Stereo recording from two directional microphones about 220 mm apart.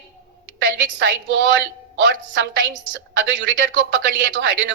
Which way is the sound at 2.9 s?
55° right (ahead or behind).